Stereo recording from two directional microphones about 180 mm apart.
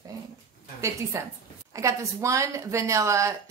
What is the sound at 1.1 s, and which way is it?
A woman's voice, 15° right (ahead or behind).